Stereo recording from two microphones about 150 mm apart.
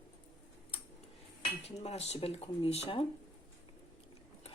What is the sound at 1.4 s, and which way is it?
Speech, 40° left (ahead or behind).